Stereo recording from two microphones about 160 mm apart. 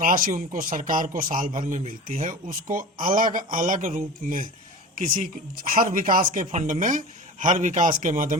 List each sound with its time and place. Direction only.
0.0 s a man's voice: 60° right (ahead or behind)